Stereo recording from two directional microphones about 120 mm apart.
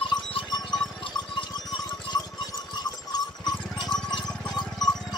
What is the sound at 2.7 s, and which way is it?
Clip-clop, 35° left (ahead or behind).